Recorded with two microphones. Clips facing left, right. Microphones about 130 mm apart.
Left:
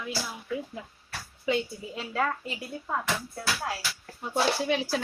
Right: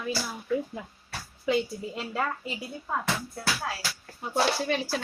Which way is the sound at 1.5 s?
5° right (ahead or behind).